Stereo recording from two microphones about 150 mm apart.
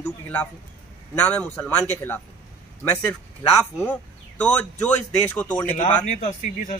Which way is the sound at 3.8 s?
10° left (ahead or behind).